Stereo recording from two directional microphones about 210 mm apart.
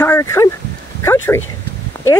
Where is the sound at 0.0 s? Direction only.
10° left (ahead or behind).